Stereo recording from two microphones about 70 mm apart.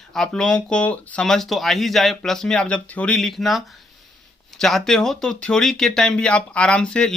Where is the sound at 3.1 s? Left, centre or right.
Centre.